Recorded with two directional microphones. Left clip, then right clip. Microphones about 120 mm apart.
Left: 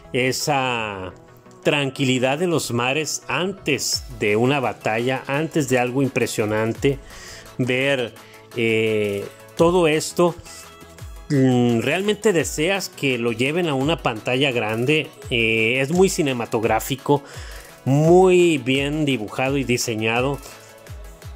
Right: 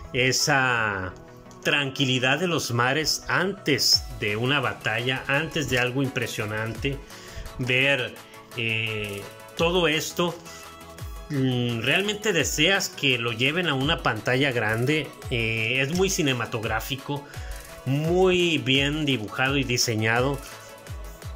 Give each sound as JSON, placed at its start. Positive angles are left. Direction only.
{"t": 0.1, "sound": "speech", "side_deg": 35}
{"t": 2.7, "sound": "speech", "side_deg": 25}
{"t": 11.2, "sound": "speech", "side_deg": 55}
{"t": 14.2, "sound": "speech", "side_deg": 25}
{"t": 15.8, "sound": "speech", "side_deg": 45}
{"t": 16.7, "sound": "speech", "side_deg": 65}
{"t": 17.8, "sound": "speech", "side_deg": 55}
{"t": 19.8, "sound": "speech", "side_deg": 20}